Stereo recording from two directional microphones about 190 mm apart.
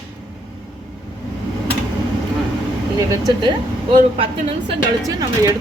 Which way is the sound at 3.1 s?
20° right (ahead or behind).